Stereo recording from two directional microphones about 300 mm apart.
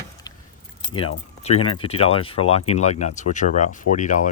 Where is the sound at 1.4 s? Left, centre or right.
Left.